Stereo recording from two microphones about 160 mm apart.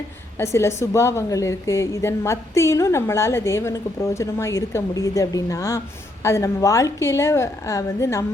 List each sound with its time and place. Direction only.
0.3 s a woman's voice: 15° left (ahead or behind)